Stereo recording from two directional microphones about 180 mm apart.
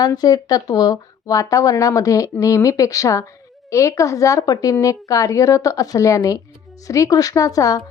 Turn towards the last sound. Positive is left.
turn(degrees=20)  # may be behind; listen again after turning